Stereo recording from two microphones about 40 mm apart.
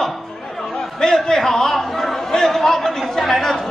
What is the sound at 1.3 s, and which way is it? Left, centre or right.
A man's voice, centre.